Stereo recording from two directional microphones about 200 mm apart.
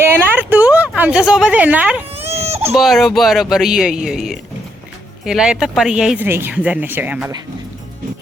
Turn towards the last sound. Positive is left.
turn(degrees=-5)  # may be behind; listen again after turning